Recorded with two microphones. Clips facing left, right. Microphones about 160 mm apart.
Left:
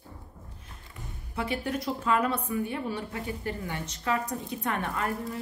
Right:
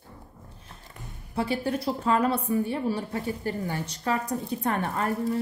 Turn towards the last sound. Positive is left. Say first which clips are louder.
# right 4 dB
turn(degrees=-35)  # may be behind; listen again after turning